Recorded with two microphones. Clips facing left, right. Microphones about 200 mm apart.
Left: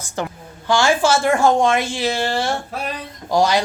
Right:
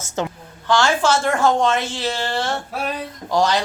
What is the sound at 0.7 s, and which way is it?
A woman's voice, 10° left (ahead or behind).